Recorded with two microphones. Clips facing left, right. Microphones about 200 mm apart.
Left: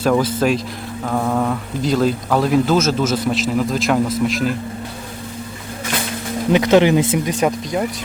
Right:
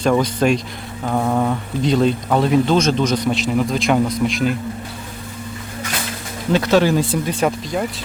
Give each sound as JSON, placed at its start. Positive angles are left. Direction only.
{"t": 0.0, "sound": "speech", "side_deg": 5}
{"t": 6.5, "sound": "speech", "side_deg": 15}
{"t": 7.4, "sound": "speech", "side_deg": 5}